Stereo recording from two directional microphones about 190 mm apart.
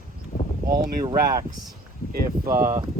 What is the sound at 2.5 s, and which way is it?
Speech, 40° right (ahead or behind).